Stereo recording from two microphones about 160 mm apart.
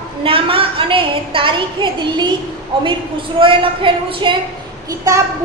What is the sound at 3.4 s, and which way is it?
Speech, 30° right (ahead or behind).